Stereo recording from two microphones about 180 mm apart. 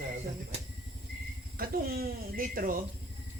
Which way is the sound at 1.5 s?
55° right (ahead or behind).